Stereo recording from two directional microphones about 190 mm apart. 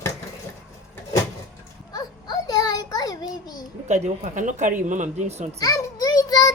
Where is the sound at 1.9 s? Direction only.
20° left (ahead or behind).